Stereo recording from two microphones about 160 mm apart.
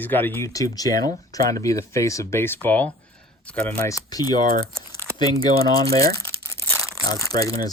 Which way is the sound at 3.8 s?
20° left (ahead or behind).